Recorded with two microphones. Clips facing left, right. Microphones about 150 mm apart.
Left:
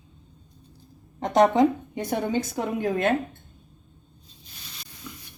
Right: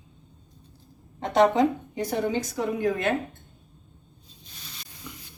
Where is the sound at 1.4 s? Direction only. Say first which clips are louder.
Left 1 dB; centre (ahead or behind).